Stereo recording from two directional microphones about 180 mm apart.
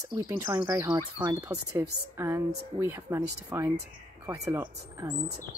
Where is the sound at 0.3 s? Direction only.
10° right (ahead or behind).